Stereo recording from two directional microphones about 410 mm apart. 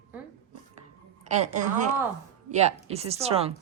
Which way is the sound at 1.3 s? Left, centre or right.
Centre.